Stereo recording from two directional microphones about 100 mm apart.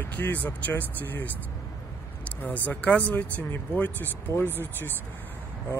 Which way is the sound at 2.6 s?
15° left (ahead or behind).